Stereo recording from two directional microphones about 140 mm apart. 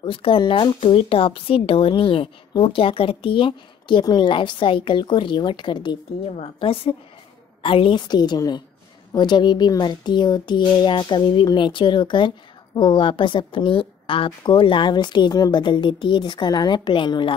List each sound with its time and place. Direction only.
0.0 s speech: 40° left (ahead or behind)